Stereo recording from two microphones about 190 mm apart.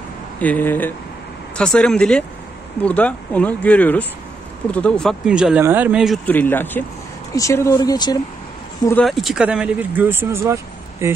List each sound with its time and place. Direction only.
0.4 s speech: 10° left (ahead or behind)
9.0 s speech: centre (ahead or behind)